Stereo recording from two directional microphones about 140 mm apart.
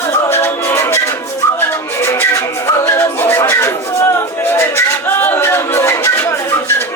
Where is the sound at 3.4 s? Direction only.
20° left (ahead or behind).